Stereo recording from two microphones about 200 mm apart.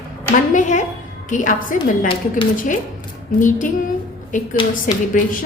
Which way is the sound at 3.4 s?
40° left (ahead or behind).